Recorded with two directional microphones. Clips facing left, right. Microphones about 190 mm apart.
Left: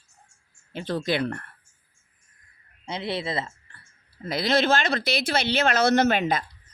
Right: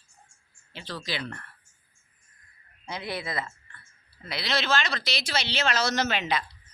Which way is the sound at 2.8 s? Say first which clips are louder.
Left 5 dB; 25° left (ahead or behind).